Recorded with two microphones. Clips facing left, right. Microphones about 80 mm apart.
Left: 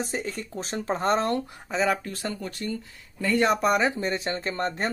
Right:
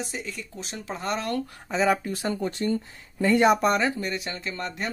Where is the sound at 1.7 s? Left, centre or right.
Centre; by 3.5 s right.